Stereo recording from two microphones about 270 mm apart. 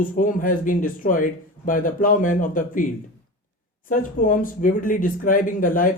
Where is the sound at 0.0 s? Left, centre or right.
Left.